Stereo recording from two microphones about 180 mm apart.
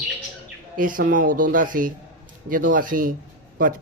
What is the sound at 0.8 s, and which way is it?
Speech, 50° right (ahead or behind).